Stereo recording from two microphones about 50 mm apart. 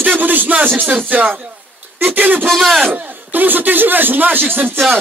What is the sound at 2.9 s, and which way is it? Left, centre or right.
Speech, right.